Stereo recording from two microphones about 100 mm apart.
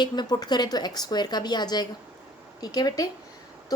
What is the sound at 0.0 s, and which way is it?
A woman's voice, 45° left (ahead or behind).